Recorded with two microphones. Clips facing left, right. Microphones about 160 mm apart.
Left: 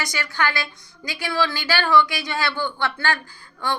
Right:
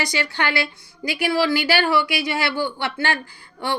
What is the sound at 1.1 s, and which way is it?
Speech, 10° right (ahead or behind).